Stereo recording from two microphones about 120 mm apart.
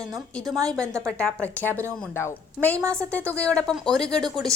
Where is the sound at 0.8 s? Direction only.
25° right (ahead or behind).